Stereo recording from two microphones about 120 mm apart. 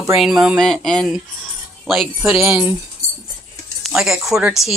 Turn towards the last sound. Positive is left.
turn(degrees=-5)  # may be behind; listen again after turning